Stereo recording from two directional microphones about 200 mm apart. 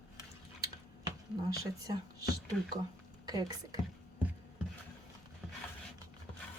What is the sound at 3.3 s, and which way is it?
Speech, 20° right (ahead or behind).